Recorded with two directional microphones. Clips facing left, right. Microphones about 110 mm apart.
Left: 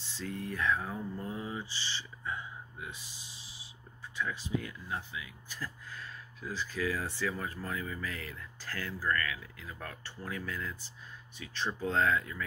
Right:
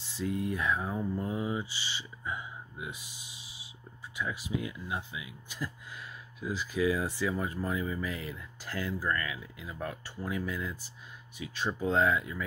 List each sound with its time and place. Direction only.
0.1 s speech: 15° right (ahead or behind)